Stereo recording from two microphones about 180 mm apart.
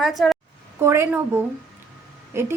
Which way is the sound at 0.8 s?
15° right (ahead or behind).